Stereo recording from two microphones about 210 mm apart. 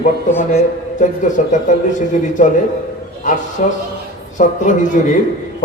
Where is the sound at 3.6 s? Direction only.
35° left (ahead or behind).